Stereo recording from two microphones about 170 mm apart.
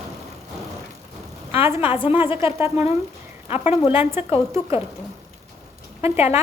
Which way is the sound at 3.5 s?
35° left (ahead or behind).